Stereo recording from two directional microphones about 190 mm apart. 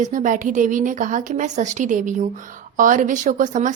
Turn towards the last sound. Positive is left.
turn(degrees=-40)  # may be behind; listen again after turning